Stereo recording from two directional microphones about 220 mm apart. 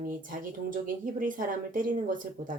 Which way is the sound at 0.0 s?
40° right (ahead or behind).